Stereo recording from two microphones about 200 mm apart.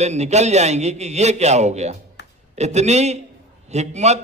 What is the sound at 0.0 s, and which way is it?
A man's voice, 35° right (ahead or behind).